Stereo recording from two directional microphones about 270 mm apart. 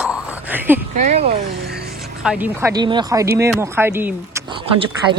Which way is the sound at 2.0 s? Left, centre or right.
Centre.